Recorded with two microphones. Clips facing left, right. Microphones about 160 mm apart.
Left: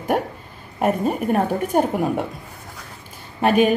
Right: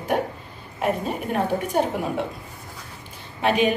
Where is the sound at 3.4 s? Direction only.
45° left (ahead or behind).